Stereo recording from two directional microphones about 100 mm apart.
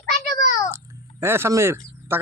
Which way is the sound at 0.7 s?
25° right (ahead or behind).